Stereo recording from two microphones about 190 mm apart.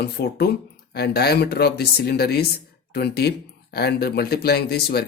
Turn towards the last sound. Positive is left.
turn(degrees=55)  # may be behind; listen again after turning